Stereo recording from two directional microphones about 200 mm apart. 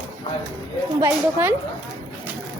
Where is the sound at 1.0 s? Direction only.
15° right (ahead or behind).